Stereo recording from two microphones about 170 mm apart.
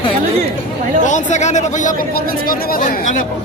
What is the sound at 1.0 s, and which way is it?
Speech, 45° left (ahead or behind).